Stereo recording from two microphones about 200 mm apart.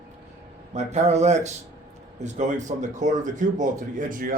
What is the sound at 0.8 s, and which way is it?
Speech, 35° right (ahead or behind).